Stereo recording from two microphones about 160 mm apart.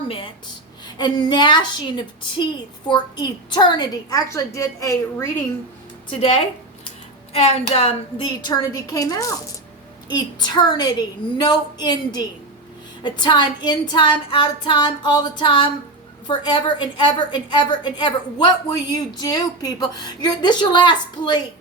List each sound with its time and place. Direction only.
0.9 s a woman's voice: 25° left (ahead or behind)
6.1 s a woman's voice: 35° left (ahead or behind)